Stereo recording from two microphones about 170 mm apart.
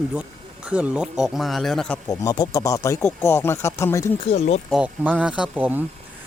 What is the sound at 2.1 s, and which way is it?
Speech, 20° left (ahead or behind).